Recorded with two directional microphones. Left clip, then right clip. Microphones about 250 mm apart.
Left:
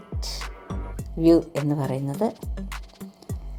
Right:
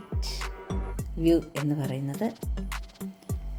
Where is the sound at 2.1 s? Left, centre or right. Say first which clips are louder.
Left 6 dB; centre.